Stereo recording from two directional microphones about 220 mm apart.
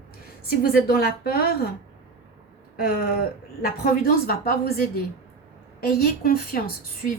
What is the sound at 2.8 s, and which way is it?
A woman's voice, 45° left (ahead or behind).